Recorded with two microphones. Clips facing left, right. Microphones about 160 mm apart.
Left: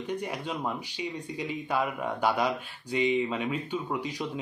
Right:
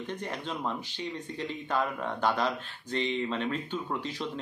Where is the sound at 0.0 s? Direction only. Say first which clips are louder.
Left 3 dB; 10° left (ahead or behind).